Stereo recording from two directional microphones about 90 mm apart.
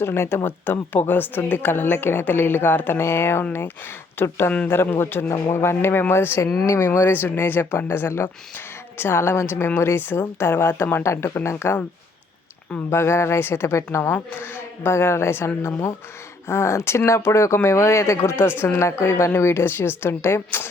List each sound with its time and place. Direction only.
0.0 s speech: 30° left (ahead or behind)
12.9 s speech: 30° left (ahead or behind)